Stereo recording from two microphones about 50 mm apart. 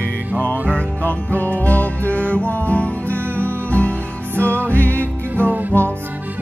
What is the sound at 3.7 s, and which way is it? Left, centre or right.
Music, left.